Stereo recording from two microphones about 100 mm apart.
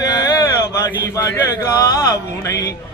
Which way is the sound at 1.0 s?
35° left (ahead or behind).